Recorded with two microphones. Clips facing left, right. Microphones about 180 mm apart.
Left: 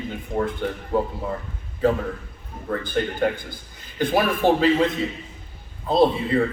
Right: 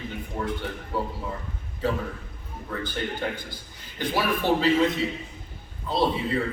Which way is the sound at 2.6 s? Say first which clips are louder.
Left 6 dB; 50° left (ahead or behind).